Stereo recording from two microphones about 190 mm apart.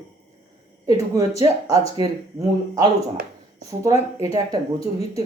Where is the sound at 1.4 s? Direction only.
20° right (ahead or behind).